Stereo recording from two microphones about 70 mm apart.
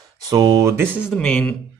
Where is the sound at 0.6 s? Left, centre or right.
Right.